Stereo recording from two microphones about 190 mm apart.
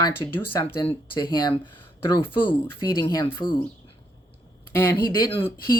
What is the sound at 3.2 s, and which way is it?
Speech, 25° left (ahead or behind).